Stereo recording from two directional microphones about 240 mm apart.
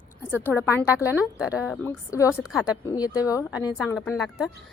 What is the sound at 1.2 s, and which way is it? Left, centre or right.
Speech, centre.